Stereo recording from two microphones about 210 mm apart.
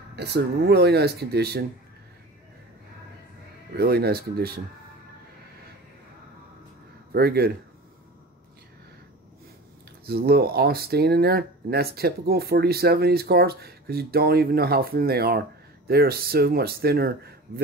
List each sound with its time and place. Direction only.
0.1 s speech: 50° right (ahead or behind)
3.7 s speech: 50° right (ahead or behind)
7.1 s speech: 50° right (ahead or behind)
10.0 s speech: 50° right (ahead or behind)